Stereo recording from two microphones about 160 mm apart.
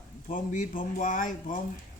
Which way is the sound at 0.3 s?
60° left (ahead or behind).